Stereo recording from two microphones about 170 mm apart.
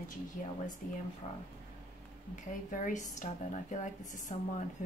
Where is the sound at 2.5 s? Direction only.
50° left (ahead or behind).